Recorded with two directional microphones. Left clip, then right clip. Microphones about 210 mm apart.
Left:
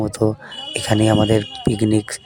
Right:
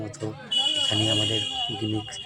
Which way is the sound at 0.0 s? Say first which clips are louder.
Left 14 dB; 40° left (ahead or behind).